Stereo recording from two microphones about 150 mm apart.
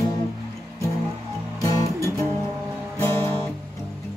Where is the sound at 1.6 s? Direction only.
20° left (ahead or behind).